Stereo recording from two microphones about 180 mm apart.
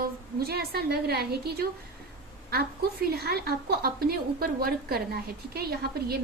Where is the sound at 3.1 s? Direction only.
60° right (ahead or behind).